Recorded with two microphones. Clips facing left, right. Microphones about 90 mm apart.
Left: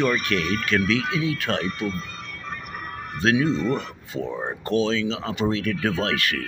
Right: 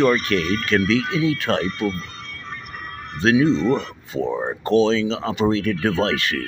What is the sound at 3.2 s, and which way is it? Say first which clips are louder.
Speech: right 4 dB; 25° right (ahead or behind).